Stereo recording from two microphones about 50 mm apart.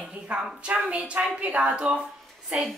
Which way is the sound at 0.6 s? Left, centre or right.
Right.